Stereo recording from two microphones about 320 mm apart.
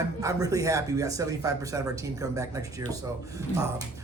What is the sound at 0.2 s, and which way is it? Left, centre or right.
Speech, centre.